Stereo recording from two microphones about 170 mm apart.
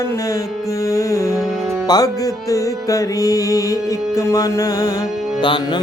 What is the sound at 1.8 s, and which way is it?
Speech, 25° left (ahead or behind).